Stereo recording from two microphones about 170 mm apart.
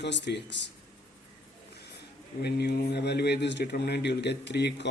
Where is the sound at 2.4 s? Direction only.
75° left (ahead or behind).